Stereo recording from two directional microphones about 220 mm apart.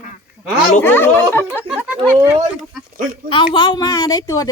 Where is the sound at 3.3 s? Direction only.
20° left (ahead or behind).